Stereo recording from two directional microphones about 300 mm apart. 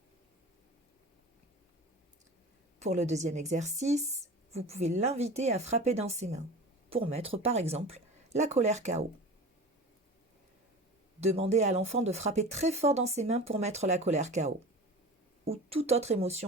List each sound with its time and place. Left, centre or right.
2.7 s speech: right
11.2 s speech: right